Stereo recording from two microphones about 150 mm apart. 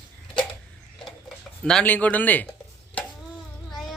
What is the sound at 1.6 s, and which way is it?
Speech, 5° left (ahead or behind).